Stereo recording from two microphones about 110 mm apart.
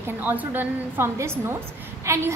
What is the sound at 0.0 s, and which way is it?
A woman's voice, 15° right (ahead or behind).